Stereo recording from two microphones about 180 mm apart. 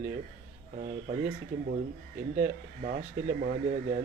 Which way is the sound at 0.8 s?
50° right (ahead or behind).